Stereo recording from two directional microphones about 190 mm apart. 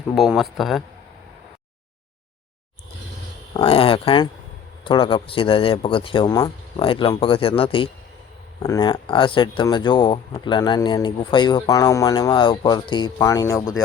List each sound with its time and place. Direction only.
0.1 s speech: centre (ahead or behind)
3.5 s speech: 30° left (ahead or behind)